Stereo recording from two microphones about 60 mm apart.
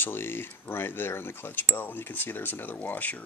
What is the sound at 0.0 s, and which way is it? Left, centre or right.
Speech, left.